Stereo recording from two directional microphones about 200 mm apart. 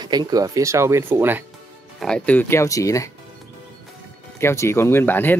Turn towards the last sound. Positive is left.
turn(degrees=10)  # may be behind; listen again after turning